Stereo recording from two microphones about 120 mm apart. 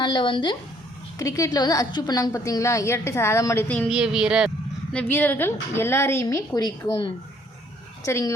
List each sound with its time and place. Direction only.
0.0 s a woman's voice: 40° left (ahead or behind)
1.2 s a woman's voice: 30° left (ahead or behind)
3.8 s speech: 5° right (ahead or behind)
4.9 s a woman's voice: 15° left (ahead or behind); by 7.1 s 40° left (ahead or behind)
8.0 s a woman's voice: 25° left (ahead or behind)